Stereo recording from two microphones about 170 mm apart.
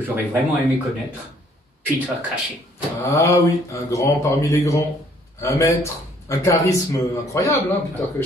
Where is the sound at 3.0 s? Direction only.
15° left (ahead or behind).